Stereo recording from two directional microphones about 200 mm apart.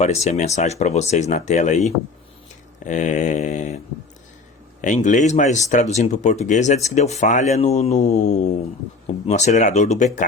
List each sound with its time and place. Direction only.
0.0 s speech: 35° left (ahead or behind)
4.8 s speech: 40° left (ahead or behind)